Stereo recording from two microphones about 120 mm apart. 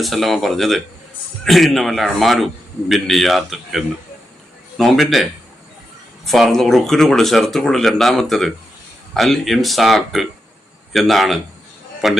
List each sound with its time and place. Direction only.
0.0 s speech: centre (ahead or behind)